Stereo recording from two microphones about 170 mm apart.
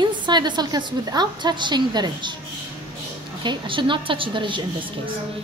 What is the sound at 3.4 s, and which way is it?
A woman's voice, 30° right (ahead or behind).